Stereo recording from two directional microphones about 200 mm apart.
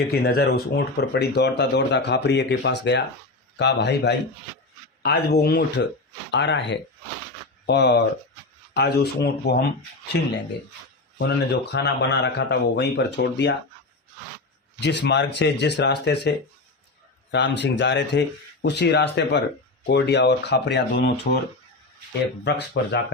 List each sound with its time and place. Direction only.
0.1 s speech: 55° left (ahead or behind)
11.2 s speech: 55° left (ahead or behind)
14.8 s speech: 60° left (ahead or behind)
17.3 s speech: 60° left (ahead or behind)
22.4 s speech: 60° left (ahead or behind)